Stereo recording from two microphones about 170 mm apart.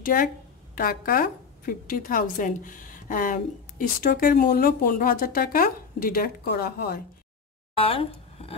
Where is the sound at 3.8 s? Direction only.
65° left (ahead or behind).